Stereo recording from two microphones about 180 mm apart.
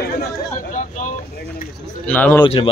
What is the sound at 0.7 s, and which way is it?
Vehicle, 45° left (ahead or behind).